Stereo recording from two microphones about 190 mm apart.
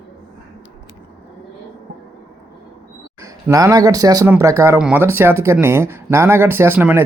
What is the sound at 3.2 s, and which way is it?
Speech, 15° right (ahead or behind).